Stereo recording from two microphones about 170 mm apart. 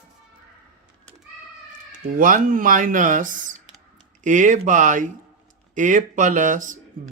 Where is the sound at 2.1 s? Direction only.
55° right (ahead or behind).